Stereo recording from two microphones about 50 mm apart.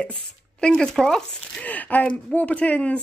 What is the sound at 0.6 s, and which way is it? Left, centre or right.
Speech, centre.